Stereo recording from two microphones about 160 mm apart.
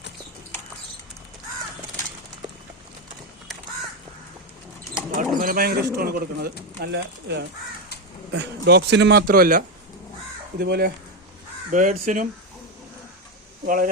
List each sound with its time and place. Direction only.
5.1 s speech: 60° right (ahead or behind)
6.8 s speech: 90° right; by 9.6 s 60° right (ahead or behind)
10.6 s speech: 80° right
11.7 s speech: 55° right (ahead or behind)
13.7 s speech: 60° right (ahead or behind)